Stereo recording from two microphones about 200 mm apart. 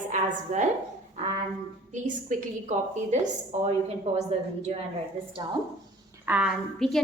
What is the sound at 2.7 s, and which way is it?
A woman's voice, 35° right (ahead or behind).